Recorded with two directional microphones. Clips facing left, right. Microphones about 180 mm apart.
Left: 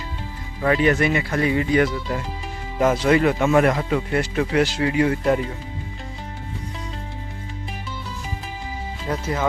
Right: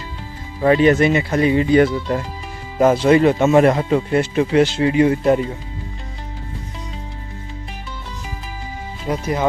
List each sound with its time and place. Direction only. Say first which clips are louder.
0.6 s speech: right 5 dB; 25° right (ahead or behind)
9.0 s speech: right 4 dB; 15° right (ahead or behind)